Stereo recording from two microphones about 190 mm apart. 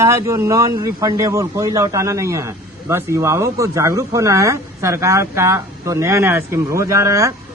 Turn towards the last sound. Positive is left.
turn(degrees=-15)  # may be behind; listen again after turning